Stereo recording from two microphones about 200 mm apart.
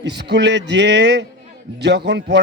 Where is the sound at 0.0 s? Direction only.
55° right (ahead or behind).